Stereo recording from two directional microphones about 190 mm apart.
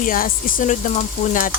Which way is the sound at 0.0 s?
45° left (ahead or behind).